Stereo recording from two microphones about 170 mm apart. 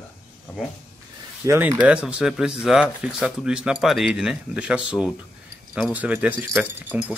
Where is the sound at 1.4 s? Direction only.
15° right (ahead or behind).